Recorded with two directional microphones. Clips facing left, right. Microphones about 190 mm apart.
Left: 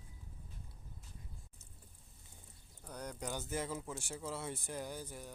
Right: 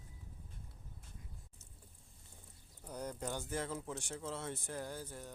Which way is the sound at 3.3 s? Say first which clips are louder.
Left 2 dB; 5° left (ahead or behind).